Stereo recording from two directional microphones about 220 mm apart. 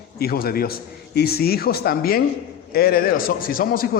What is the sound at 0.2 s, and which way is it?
A man's voice, 45° left (ahead or behind).